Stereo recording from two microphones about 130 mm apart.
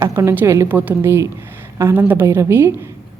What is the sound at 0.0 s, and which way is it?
A woman's voice, 20° right (ahead or behind).